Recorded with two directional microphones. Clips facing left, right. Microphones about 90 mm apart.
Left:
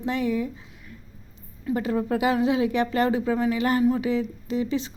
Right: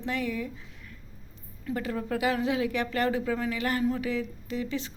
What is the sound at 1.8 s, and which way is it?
Speech, 25° left (ahead or behind).